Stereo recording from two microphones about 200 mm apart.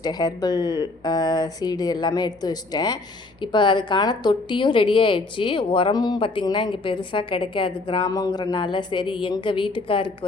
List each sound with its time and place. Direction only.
0.0 s a woman's voice: 20° left (ahead or behind)